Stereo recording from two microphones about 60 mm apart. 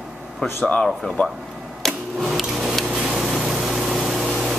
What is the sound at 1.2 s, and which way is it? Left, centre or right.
Speech, left.